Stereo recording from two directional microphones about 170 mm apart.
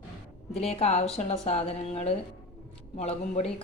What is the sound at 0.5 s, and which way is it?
Speech, 35° left (ahead or behind).